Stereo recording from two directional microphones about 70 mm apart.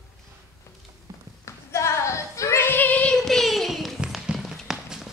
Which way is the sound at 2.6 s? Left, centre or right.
Left.